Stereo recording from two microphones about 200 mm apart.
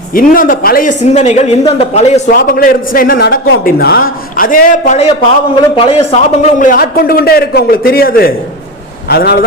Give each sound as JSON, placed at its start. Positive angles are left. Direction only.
{"t": 0.1, "sound": "a man's voice", "side_deg": 45}
{"t": 2.3, "sound": "a man's voice", "side_deg": 45}
{"t": 5.5, "sound": "a man's voice", "side_deg": 25}